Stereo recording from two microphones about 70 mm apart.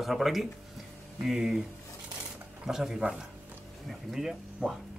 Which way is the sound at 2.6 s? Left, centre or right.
Centre.